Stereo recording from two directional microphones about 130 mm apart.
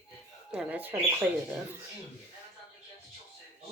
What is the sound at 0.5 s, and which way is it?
Speech, 10° right (ahead or behind).